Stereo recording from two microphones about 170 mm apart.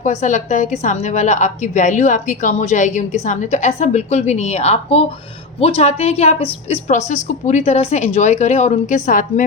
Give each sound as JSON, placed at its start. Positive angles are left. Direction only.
{"t": 0.0, "sound": "a woman's voice", "side_deg": 45}